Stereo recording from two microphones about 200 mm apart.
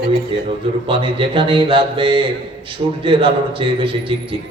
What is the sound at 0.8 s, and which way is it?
A man's voice, 25° right (ahead or behind).